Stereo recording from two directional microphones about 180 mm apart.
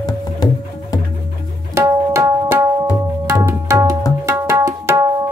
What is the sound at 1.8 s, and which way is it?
Tabla, 15° right (ahead or behind).